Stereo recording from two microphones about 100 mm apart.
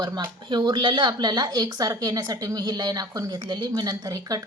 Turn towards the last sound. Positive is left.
turn(degrees=-40)  # may be behind; listen again after turning